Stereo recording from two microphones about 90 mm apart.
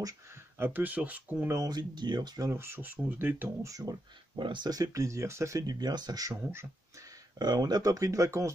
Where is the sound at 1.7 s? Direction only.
55° right (ahead or behind).